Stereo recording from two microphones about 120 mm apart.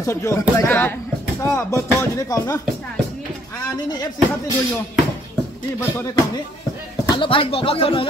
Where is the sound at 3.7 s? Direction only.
35° left (ahead or behind).